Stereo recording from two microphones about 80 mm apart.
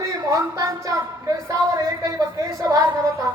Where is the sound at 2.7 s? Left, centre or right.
Right.